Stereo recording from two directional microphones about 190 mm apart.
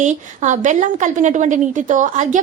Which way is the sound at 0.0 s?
40° right (ahead or behind).